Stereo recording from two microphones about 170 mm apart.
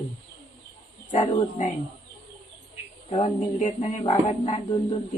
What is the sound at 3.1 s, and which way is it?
Speech, 45° left (ahead or behind).